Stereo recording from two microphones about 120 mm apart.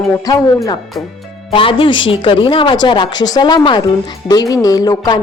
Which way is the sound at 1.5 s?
45° left (ahead or behind).